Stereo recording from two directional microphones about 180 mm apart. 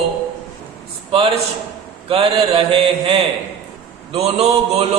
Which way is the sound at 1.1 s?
30° right (ahead or behind).